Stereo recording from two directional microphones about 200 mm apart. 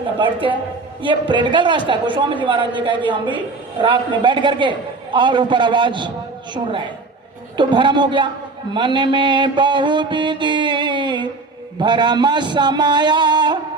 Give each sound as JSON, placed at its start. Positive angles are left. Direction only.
{"t": 0.2, "sound": "a man's voice", "side_deg": -25}